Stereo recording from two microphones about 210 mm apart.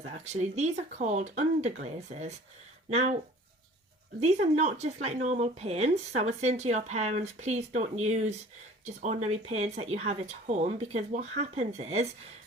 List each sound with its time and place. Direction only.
0.0 s speech: 30° right (ahead or behind)
4.2 s speech: 30° right (ahead or behind)